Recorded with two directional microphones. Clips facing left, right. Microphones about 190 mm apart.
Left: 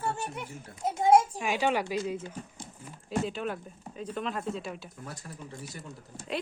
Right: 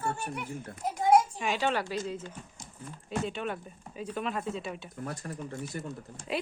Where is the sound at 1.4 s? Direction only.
10° left (ahead or behind).